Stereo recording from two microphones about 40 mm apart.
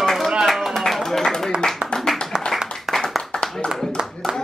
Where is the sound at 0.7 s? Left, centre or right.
Centre.